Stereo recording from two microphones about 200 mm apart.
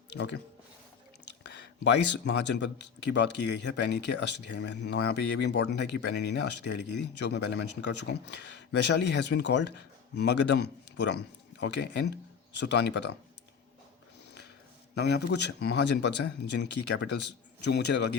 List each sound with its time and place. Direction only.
1.5 s a man's voice: 60° left (ahead or behind)
14.9 s speech: 55° left (ahead or behind)